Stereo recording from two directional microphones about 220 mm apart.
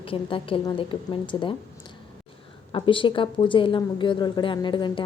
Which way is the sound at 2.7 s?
25° left (ahead or behind).